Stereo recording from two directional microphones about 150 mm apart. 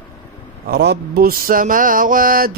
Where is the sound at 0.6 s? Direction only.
90° right; by 2.5 s 75° right (ahead or behind).